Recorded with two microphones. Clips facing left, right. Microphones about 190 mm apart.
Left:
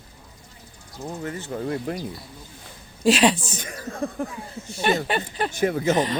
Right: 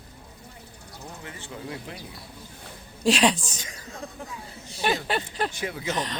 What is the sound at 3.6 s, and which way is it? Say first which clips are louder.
Speech: left 9 dB; 55° left (ahead or behind).